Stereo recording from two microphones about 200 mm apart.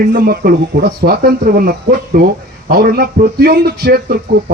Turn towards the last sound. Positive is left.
turn(degrees=-50)  # may be behind; listen again after turning